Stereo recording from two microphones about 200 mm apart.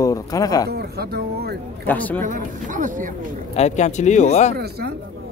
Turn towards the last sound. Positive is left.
turn(degrees=-50)  # may be behind; listen again after turning